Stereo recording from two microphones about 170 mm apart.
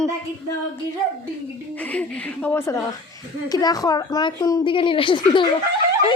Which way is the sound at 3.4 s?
20° left (ahead or behind).